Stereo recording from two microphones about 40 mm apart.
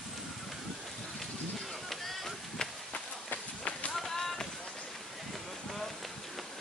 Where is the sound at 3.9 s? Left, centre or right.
Centre.